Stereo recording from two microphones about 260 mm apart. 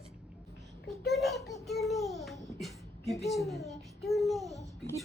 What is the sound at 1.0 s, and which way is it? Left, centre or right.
Speech, centre.